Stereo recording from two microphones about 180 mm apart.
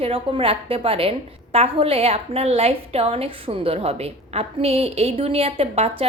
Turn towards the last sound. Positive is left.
turn(degrees=-35)  # may be behind; listen again after turning